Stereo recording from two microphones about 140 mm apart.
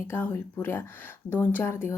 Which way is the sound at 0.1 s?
15° left (ahead or behind).